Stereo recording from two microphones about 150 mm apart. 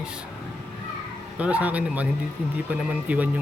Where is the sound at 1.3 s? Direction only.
10° right (ahead or behind).